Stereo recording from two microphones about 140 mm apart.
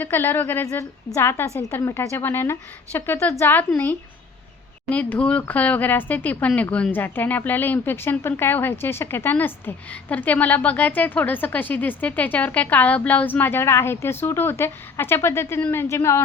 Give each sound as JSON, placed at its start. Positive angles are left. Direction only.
{"t": 0.0, "sound": "a woman's voice", "side_deg": 15}
{"t": 4.9, "sound": "a woman's voice", "side_deg": 10}